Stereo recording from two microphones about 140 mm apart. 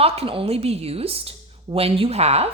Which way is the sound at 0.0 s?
45° right (ahead or behind).